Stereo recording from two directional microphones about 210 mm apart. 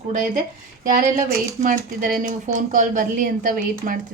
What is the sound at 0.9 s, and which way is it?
Speech, 40° right (ahead or behind).